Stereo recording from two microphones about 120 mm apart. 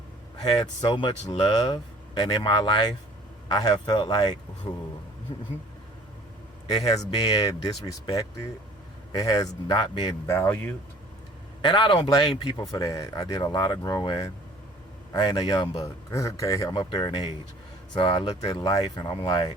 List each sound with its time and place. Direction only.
0.4 s speech: 45° left (ahead or behind)
6.8 s speech: 30° left (ahead or behind)
10.2 s speech: 15° left (ahead or behind)
11.6 s a man's voice: 40° left (ahead or behind)
15.8 s speech: 25° left (ahead or behind)